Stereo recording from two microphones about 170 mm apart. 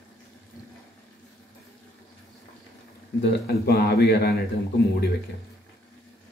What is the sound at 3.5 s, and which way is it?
Speech, 65° left (ahead or behind).